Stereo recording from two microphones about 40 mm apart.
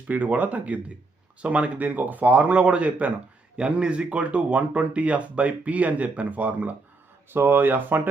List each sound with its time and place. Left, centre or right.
0.1 s speech: right
7.3 s speech: right